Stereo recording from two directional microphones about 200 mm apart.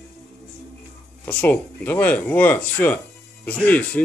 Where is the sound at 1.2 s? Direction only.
10° left (ahead or behind).